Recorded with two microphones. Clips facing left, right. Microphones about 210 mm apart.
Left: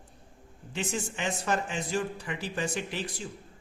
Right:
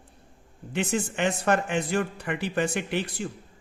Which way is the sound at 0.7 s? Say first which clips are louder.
Right 6 dB; 60° right (ahead or behind).